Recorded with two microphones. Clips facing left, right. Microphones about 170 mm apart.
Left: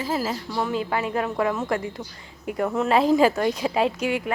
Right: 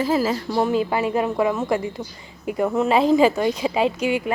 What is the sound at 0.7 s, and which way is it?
Speech, 10° right (ahead or behind).